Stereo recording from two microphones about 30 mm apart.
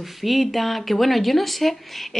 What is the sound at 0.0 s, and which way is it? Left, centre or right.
Speech, centre.